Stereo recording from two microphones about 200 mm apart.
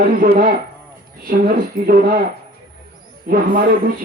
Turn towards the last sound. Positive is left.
turn(degrees=-45)  # may be behind; listen again after turning